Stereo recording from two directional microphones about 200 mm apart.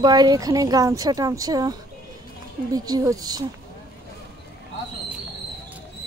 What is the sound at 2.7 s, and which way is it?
Speech, 20° right (ahead or behind).